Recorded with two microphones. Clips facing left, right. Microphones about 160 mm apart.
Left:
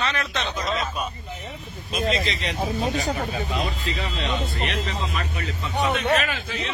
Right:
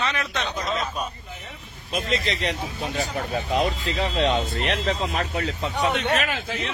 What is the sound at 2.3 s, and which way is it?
Speech, 55° right (ahead or behind).